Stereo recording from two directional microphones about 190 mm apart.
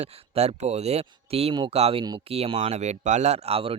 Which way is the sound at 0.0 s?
35° right (ahead or behind).